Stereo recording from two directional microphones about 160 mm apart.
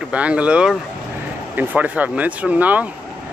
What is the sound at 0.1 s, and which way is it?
Speech, 10° right (ahead or behind).